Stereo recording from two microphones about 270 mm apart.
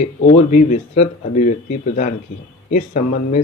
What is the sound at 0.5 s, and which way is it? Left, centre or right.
Speech, left.